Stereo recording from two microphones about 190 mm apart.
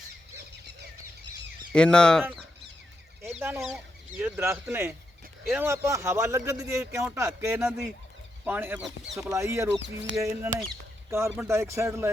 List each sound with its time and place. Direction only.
1.7 s speech: 5° left (ahead or behind)
3.3 s speech: 10° right (ahead or behind)
9.8 s speech: 70° right (ahead or behind)
10.2 s speech: 15° right (ahead or behind)